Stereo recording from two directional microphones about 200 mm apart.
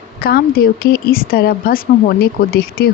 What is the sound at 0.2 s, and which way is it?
A woman's voice, 50° left (ahead or behind).